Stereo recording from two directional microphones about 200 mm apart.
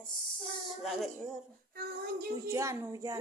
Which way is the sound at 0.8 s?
Centre (ahead or behind).